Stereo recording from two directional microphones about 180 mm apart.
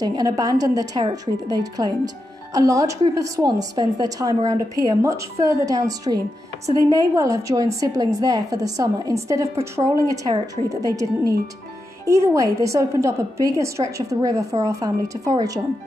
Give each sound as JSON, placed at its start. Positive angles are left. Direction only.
{"t": 0.0, "sound": "a woman's voice", "side_deg": -20}